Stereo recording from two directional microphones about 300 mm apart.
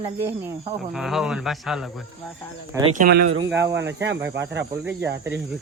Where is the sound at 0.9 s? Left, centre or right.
Centre.